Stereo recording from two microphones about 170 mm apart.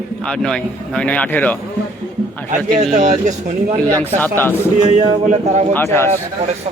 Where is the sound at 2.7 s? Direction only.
40° right (ahead or behind).